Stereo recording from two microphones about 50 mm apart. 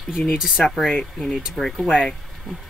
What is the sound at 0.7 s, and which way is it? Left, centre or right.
Speech, centre.